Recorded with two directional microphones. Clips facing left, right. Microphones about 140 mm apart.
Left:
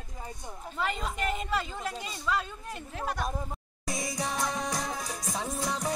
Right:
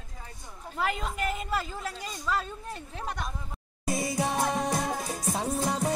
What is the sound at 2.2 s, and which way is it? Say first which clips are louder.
Speech: even; 35° right (ahead or behind).